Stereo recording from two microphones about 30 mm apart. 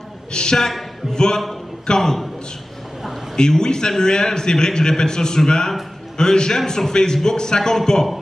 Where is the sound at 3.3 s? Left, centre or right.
Left.